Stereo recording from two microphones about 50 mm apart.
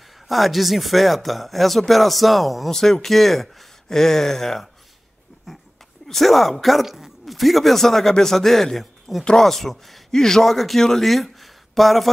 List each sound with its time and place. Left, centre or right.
0.3 s speech: centre
6.0 s speech: centre
9.2 s speech: centre
9.5 s speech: centre